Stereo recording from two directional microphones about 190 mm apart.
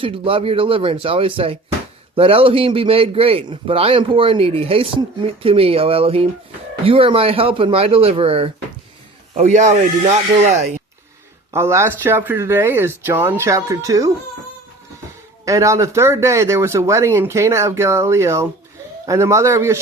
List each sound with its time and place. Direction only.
0.0 s a man's voice: 30° right (ahead or behind)
11.5 s speech: 15° right (ahead or behind)
15.4 s speech: 15° right (ahead or behind)